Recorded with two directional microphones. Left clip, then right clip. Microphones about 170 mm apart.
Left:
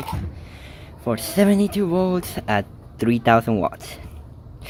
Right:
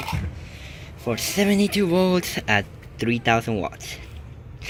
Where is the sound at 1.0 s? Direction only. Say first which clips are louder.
Left 3 dB; 25° left (ahead or behind).